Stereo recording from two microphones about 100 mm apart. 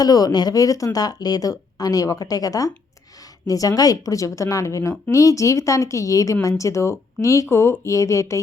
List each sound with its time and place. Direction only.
0.0 s a woman's voice: 40° left (ahead or behind)